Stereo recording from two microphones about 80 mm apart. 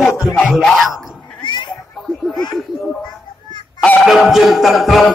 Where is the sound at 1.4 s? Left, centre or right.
Left.